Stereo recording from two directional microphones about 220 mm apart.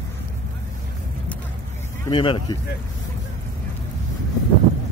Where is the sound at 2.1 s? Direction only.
20° left (ahead or behind).